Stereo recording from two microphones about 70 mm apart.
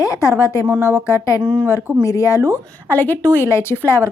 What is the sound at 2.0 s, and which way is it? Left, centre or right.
Speech, left.